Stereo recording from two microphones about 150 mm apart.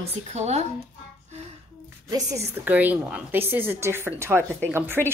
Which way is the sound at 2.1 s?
20° right (ahead or behind).